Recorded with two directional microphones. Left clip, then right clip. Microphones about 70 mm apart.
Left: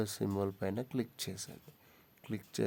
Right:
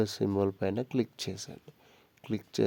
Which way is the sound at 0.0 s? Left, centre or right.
Right.